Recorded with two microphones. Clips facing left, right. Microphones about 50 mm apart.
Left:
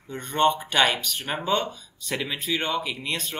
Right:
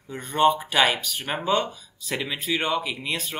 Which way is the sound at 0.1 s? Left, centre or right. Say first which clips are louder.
Right 2 dB; centre.